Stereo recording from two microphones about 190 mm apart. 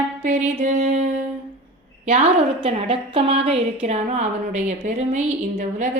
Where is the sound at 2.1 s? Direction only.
30° right (ahead or behind).